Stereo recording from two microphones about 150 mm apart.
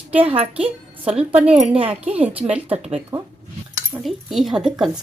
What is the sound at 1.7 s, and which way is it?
Speech, 40° right (ahead or behind).